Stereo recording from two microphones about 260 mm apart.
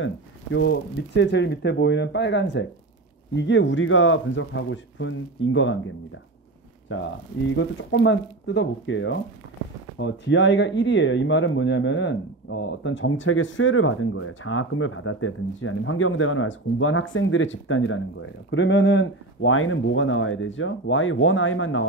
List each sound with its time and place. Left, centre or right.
0.0 s speech: left
6.9 s speech: left